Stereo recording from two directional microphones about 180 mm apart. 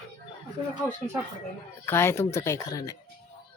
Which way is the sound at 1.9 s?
15° left (ahead or behind).